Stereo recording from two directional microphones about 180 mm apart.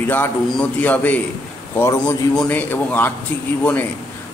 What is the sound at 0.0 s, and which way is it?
A man's voice, 10° left (ahead or behind).